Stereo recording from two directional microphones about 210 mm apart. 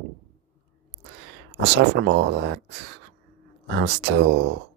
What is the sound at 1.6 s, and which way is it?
Speech, 55° right (ahead or behind).